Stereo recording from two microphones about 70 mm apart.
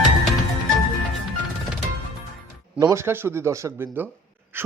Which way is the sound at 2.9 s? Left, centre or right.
Right.